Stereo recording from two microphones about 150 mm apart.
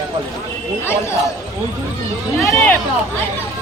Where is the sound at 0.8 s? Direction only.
15° left (ahead or behind).